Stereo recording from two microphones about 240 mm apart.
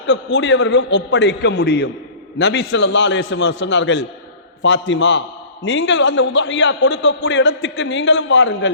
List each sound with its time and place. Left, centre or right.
0.1 s a man's voice: left